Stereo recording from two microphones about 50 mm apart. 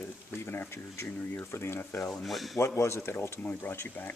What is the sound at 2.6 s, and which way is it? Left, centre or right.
Speech, left.